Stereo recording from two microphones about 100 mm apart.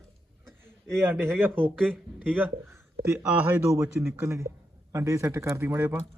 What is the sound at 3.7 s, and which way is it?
A man's voice, 30° right (ahead or behind).